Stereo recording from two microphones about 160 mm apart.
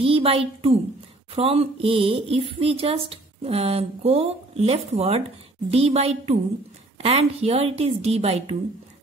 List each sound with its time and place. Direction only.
0.0 s a child's voice: 35° right (ahead or behind)